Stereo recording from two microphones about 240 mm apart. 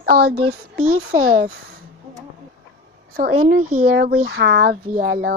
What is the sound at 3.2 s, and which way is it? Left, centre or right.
A woman's voice, right.